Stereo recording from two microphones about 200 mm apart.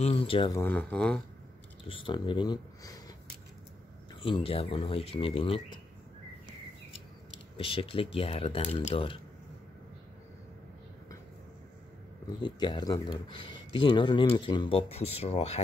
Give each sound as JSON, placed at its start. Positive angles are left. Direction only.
{"t": 0.0, "sound": "speech", "side_deg": 30}
{"t": 0.6, "sound": "speech", "side_deg": 10}
{"t": 1.9, "sound": "speech", "side_deg": 25}
{"t": 4.2, "sound": "speech", "side_deg": 25}
{"t": 7.5, "sound": "speech", "side_deg": 25}
{"t": 12.4, "sound": "speech", "side_deg": 20}